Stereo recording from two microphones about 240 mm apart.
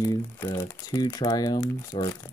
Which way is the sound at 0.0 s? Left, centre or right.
Centre.